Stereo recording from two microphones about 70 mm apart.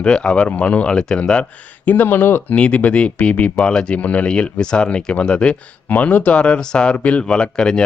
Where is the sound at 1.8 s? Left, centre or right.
Left.